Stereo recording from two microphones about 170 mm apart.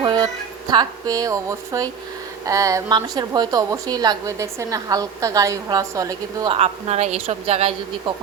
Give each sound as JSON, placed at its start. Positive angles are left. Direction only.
{"t": 0.0, "sound": "music", "side_deg": -25}
{"t": 0.7, "sound": "a woman's voice", "side_deg": -25}
{"t": 6.5, "sound": "a woman's voice", "side_deg": -40}